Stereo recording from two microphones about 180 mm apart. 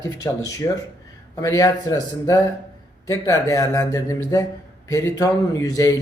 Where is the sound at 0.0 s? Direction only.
20° left (ahead or behind).